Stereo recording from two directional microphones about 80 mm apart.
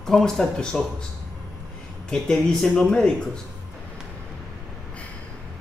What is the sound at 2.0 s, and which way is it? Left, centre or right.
Speech, centre.